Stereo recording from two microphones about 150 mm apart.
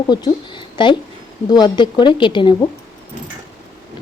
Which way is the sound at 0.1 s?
30° left (ahead or behind).